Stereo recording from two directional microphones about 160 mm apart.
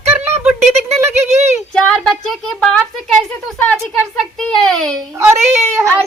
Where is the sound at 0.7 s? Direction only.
45° right (ahead or behind).